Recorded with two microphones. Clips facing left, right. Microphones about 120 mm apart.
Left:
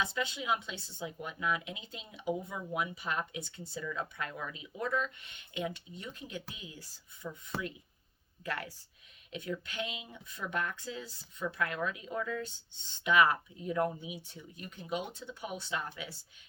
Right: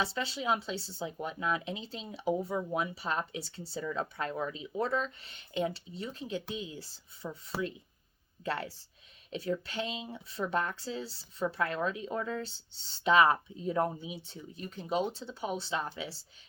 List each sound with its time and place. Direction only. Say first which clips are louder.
0.0 s speech: right 2 dB; 35° right (ahead or behind)
7.5 s speech: right 4 dB; centre (ahead or behind)
8.4 s speech: right 4 dB; 30° right (ahead or behind)